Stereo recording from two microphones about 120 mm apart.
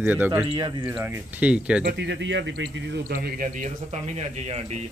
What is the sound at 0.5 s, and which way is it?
Speech, 45° right (ahead or behind).